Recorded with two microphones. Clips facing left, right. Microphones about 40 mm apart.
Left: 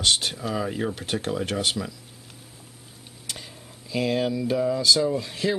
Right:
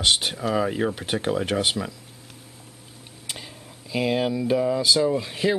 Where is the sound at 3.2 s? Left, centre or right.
Centre.